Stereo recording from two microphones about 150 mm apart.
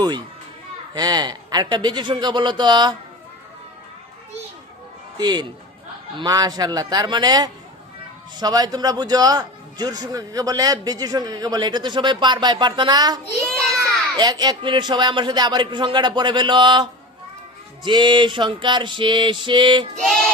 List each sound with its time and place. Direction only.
0.9 s a man's voice: 25° right (ahead or behind)
5.1 s a man's voice: 30° right (ahead or behind)
13.5 s a sound: centre (ahead or behind)
14.2 s speech: 30° right (ahead or behind)